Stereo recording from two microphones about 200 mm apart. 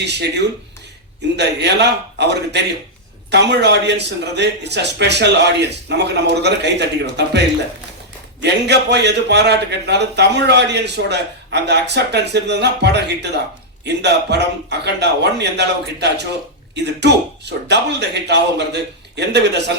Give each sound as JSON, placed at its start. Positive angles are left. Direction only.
{"t": 0.0, "sound": "a man's voice", "side_deg": -60}